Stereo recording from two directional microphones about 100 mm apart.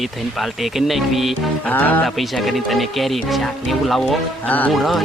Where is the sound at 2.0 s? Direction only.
Centre (ahead or behind).